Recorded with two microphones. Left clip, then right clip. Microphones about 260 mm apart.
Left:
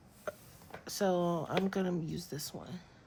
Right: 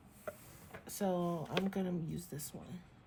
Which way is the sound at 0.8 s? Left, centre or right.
Left.